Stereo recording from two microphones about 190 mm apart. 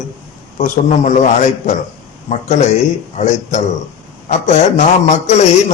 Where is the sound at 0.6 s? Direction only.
40° left (ahead or behind).